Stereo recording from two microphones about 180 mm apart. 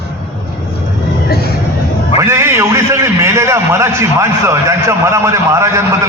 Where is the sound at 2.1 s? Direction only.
15° right (ahead or behind).